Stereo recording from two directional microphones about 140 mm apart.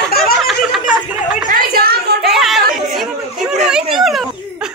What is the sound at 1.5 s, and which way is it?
Speech, 90° right.